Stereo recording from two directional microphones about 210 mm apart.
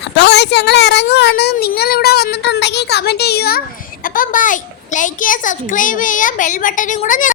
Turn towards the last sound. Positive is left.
turn(degrees=40)  # may be behind; listen again after turning